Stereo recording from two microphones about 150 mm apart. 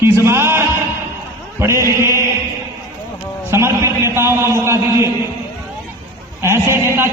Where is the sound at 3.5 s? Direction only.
15° right (ahead or behind).